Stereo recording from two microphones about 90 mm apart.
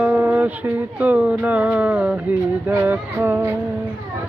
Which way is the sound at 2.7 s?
25° right (ahead or behind).